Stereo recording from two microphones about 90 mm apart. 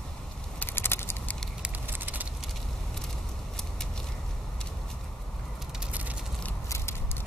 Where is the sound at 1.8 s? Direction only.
20° right (ahead or behind).